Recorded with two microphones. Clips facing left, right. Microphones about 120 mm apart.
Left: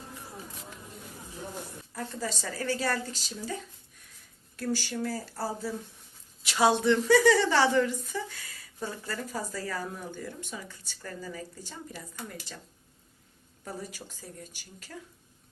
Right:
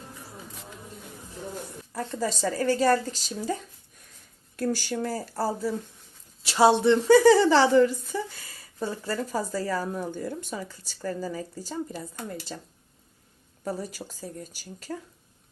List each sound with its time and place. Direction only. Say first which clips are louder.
1.9 s speech: right 6 dB; 40° right (ahead or behind)
4.5 s speech: right 4 dB; 45° right (ahead or behind)
6.4 s speech: right 5 dB; 30° right (ahead or behind)